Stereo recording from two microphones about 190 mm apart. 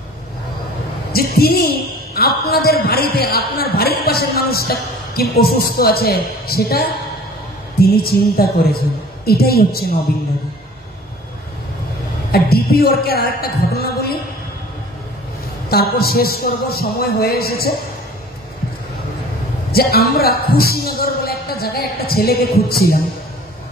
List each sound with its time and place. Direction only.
1.1 s speech: 55° left (ahead or behind)
12.3 s a woman's voice: 55° left (ahead or behind)
15.7 s speech: 55° left (ahead or behind)
19.7 s speech: 55° left (ahead or behind)